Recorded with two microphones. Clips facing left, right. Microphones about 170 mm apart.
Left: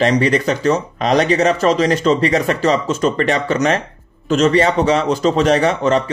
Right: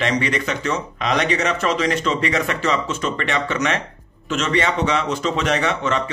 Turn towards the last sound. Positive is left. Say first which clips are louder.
# left 7 dB
turn(degrees=35)  # may be behind; listen again after turning